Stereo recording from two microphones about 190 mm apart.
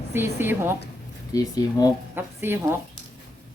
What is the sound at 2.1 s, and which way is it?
Speech, 10° right (ahead or behind).